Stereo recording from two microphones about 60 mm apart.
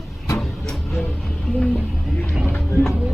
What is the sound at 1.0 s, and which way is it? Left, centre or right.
Music, centre.